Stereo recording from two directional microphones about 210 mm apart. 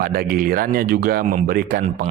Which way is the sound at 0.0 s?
45° right (ahead or behind).